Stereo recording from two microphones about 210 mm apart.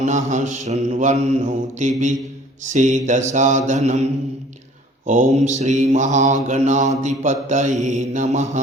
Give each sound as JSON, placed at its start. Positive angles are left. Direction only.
{"t": 0.3, "sound": "mantra", "side_deg": -35}